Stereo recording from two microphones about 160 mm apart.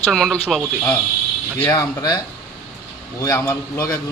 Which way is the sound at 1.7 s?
20° left (ahead or behind).